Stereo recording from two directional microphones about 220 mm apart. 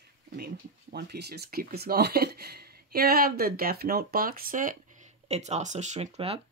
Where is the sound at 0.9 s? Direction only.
50° right (ahead or behind).